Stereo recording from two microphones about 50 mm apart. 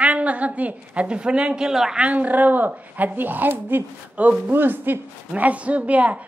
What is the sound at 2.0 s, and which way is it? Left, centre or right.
A woman's voice, right.